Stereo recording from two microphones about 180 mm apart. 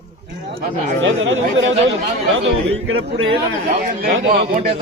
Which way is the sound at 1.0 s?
90° right.